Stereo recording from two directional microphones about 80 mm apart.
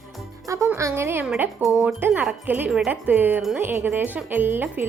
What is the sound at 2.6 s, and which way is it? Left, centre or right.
Speech, centre.